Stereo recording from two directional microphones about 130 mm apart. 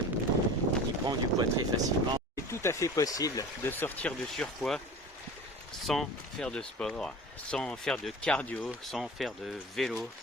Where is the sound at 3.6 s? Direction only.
15° left (ahead or behind).